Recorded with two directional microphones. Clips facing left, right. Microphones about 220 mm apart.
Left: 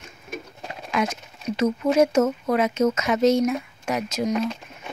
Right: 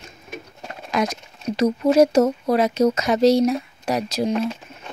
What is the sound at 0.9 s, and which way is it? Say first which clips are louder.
Speech: right 2 dB; 40° right (ahead or behind).